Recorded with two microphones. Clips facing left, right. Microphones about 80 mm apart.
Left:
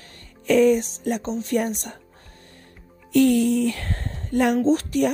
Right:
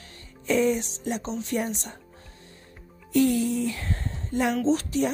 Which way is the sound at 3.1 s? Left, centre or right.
Left.